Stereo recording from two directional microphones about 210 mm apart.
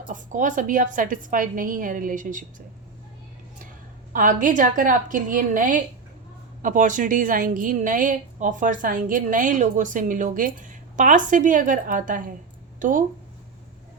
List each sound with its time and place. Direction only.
0.1 s a woman's voice: 35° right (ahead or behind)
4.1 s a woman's voice: 40° right (ahead or behind)